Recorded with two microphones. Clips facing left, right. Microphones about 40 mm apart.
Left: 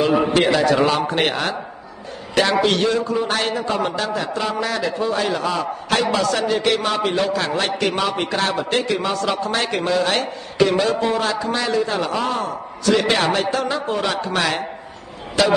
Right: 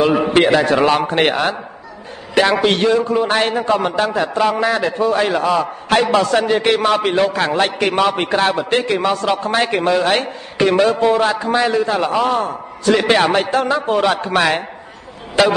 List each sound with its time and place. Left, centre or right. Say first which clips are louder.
0.3 s a man's voice: right 3 dB; right